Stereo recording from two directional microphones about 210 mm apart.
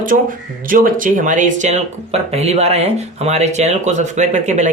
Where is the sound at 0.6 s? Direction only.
40° right (ahead or behind).